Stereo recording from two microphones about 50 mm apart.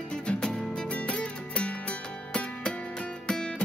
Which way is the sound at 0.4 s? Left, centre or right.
Centre.